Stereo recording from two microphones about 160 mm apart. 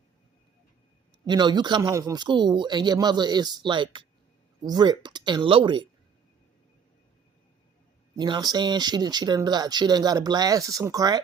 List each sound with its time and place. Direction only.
1.3 s speech: 25° right (ahead or behind)
8.1 s speech: 25° right (ahead or behind)